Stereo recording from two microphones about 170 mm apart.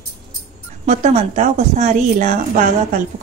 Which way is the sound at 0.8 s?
45° right (ahead or behind).